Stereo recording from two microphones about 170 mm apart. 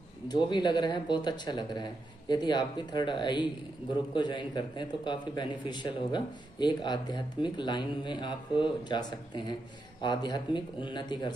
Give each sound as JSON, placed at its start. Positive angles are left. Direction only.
{"t": 0.3, "sound": "a man's voice", "side_deg": 25}